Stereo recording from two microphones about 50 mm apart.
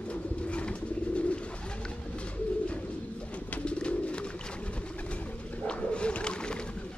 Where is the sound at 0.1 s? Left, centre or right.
Left.